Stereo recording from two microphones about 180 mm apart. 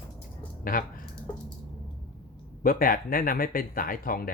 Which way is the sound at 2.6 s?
50° left (ahead or behind).